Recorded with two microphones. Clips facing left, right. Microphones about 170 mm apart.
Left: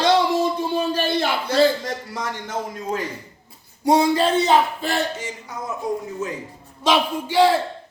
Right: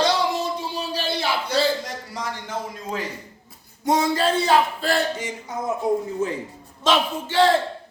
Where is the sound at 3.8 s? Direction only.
30° left (ahead or behind).